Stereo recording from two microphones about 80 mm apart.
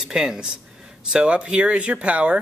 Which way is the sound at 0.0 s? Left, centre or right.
Centre.